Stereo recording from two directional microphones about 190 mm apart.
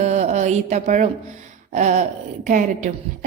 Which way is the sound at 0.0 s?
35° right (ahead or behind).